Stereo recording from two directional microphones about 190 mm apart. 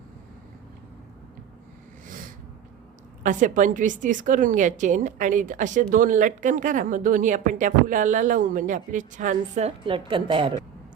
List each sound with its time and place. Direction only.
3.2 s speech: 40° right (ahead or behind); by 10.5 s 25° right (ahead or behind)